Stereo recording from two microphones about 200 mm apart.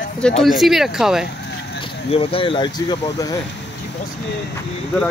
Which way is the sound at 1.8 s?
30° left (ahead or behind).